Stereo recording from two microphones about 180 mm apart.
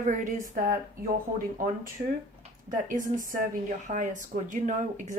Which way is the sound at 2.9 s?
45° right (ahead or behind).